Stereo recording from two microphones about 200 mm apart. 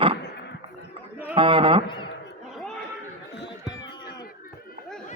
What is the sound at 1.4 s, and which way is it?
Speech, 25° right (ahead or behind).